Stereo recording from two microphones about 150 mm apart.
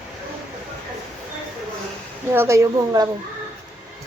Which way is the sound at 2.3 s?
20° right (ahead or behind).